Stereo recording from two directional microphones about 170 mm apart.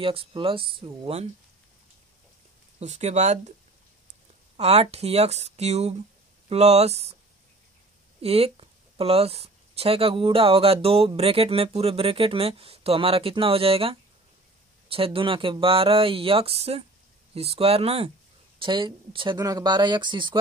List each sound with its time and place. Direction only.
0.0 s speech: 30° right (ahead or behind)
2.8 s speech: 40° right (ahead or behind)
4.6 s speech: 40° right (ahead or behind)
8.2 s speech: 35° right (ahead or behind)